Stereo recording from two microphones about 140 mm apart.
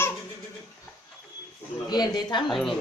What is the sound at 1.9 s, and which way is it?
Speech, 30° left (ahead or behind).